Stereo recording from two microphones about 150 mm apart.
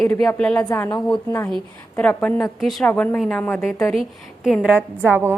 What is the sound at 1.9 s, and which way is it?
A woman's voice, 10° left (ahead or behind).